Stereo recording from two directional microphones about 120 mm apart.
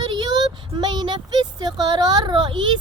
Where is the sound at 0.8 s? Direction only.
40° right (ahead or behind).